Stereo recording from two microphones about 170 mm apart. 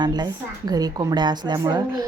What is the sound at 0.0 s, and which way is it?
Speech, 25° right (ahead or behind).